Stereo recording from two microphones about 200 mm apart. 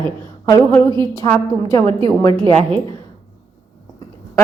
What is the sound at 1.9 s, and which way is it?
Speech, 25° right (ahead or behind).